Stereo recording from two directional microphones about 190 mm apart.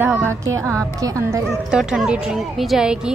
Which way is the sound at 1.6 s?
5° right (ahead or behind).